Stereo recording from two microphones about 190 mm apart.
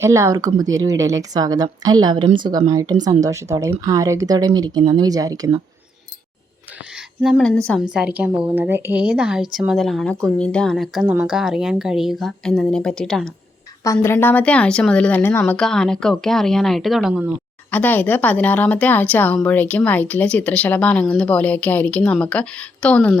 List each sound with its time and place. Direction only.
0.0 s a woman's voice: 15° right (ahead or behind)
7.2 s a woman's voice: 5° right (ahead or behind)
13.8 s a woman's voice: 15° left (ahead or behind); by 17.3 s 5° right (ahead or behind)
17.7 s speech: 10° left (ahead or behind)